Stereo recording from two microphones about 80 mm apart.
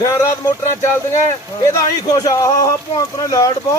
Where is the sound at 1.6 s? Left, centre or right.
Left.